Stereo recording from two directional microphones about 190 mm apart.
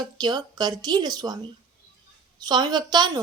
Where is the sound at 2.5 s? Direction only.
20° right (ahead or behind).